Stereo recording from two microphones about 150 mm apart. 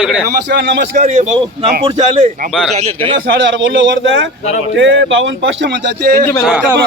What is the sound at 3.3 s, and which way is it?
Speech, 90° right.